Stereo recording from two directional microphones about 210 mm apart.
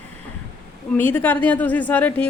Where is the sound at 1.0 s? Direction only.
10° left (ahead or behind).